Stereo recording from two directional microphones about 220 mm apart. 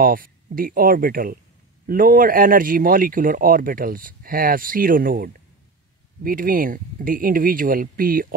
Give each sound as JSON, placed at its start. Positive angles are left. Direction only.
{"t": 0.0, "sound": "speech", "side_deg": -40}